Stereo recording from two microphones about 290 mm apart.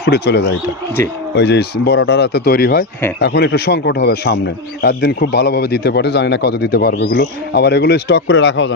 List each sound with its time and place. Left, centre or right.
0.0 s a man's voice: left